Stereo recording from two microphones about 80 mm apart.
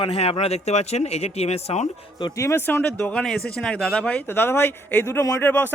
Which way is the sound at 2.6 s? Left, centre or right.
Left.